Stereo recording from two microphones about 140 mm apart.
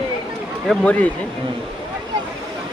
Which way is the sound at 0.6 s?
10° left (ahead or behind).